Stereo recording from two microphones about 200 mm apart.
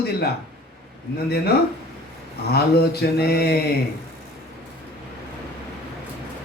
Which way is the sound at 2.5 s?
50° left (ahead or behind).